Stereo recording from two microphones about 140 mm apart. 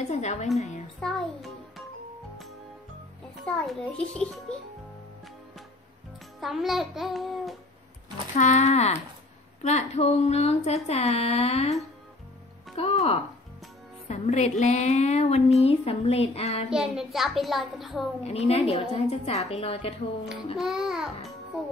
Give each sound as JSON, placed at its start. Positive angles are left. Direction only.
{"t": 0.0, "sound": "music", "side_deg": 55}
{"t": 1.0, "sound": "a child's voice", "side_deg": 5}
{"t": 3.3, "sound": "a child's voice", "side_deg": 5}
{"t": 6.4, "sound": "a child's voice", "side_deg": 0}
{"t": 8.4, "sound": "speech", "side_deg": 55}
{"t": 12.7, "sound": "speech", "side_deg": 45}
{"t": 14.0, "sound": "speech", "side_deg": 55}
{"t": 16.7, "sound": "a child's voice", "side_deg": -5}
{"t": 18.2, "sound": "speech", "side_deg": 50}
{"t": 20.5, "sound": "a child's voice", "side_deg": -5}